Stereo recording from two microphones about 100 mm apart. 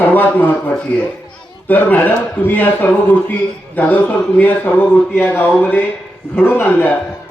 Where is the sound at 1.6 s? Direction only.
20° left (ahead or behind).